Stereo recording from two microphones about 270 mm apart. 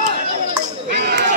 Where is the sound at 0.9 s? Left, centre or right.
Right.